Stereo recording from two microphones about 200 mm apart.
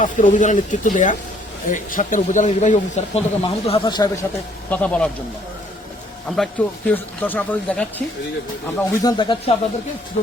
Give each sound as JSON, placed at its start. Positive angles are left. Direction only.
{"t": 0.0, "sound": "speech", "side_deg": 40}
{"t": 4.7, "sound": "a man's voice", "side_deg": 5}
{"t": 6.2, "sound": "a man's voice", "side_deg": 5}
{"t": 8.8, "sound": "speech", "side_deg": 20}